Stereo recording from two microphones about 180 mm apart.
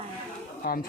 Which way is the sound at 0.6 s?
55° left (ahead or behind).